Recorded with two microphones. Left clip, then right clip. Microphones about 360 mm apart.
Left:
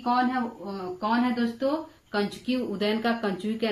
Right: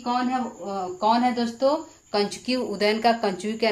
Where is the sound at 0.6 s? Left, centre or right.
Centre.